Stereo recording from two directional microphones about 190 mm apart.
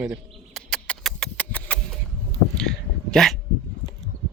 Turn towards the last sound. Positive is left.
turn(degrees=0)  # may be behind; listen again after turning